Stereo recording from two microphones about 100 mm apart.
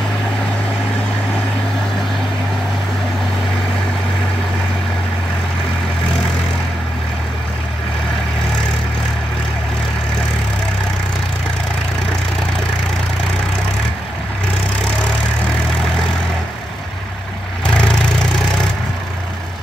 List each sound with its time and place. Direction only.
17.6 s vehicle: 10° left (ahead or behind)